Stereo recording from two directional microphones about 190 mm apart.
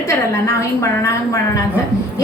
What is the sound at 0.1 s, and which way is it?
A woman's voice, 15° left (ahead or behind).